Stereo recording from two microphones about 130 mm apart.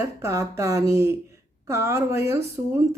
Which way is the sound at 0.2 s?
20° right (ahead or behind).